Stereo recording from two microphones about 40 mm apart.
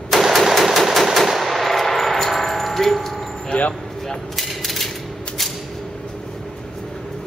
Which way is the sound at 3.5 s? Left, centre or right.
Left.